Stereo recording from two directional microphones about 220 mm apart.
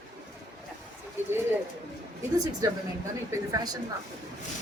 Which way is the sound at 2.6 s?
15° right (ahead or behind).